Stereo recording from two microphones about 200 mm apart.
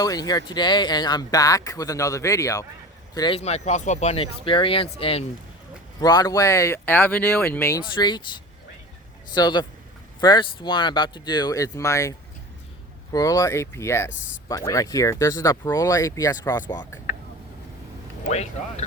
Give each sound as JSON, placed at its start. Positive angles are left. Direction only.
{"t": 0.0, "sound": "speech", "side_deg": 20}
{"t": 7.9, "sound": "speech", "side_deg": 20}
{"t": 13.1, "sound": "speech", "side_deg": 15}
{"t": 18.3, "sound": "speech", "side_deg": 35}